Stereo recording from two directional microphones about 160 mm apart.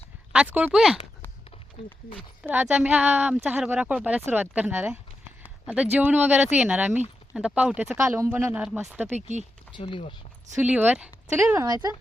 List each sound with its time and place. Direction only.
0.3 s speech: 10° right (ahead or behind)
2.1 s speech: 10° right (ahead or behind)
9.1 s speech: 45° right (ahead or behind)
9.7 s speech: 30° left (ahead or behind)
10.6 s speech: 10° right (ahead or behind)
11.5 s speech: 25° right (ahead or behind)